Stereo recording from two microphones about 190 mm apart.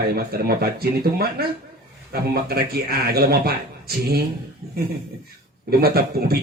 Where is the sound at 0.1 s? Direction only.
55° right (ahead or behind).